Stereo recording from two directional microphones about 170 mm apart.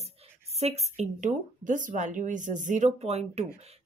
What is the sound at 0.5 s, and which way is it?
Speech, 40° right (ahead or behind).